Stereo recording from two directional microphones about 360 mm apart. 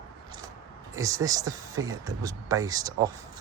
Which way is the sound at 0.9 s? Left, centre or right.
Centre.